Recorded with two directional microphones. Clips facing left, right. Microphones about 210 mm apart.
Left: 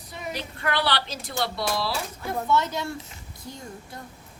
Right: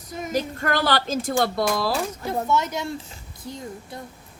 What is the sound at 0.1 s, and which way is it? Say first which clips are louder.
Speech: right 8 dB; 45° right (ahead or behind).